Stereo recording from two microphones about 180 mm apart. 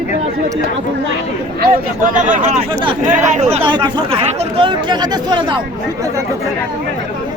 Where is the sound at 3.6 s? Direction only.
25° right (ahead or behind).